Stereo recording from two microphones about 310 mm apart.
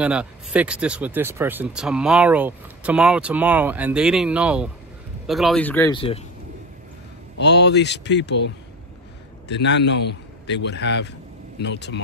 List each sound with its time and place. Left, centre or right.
0.0 s speech: centre
7.3 s a man's voice: left